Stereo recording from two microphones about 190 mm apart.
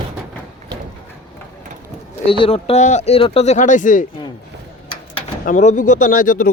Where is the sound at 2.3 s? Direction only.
30° left (ahead or behind).